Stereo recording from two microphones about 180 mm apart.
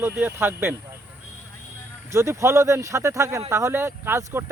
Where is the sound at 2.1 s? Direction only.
15° right (ahead or behind).